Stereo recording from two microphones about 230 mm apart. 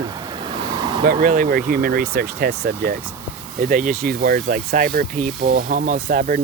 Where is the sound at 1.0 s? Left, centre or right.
Right.